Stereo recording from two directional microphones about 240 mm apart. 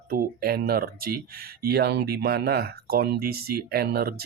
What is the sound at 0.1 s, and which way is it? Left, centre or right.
Speech, right.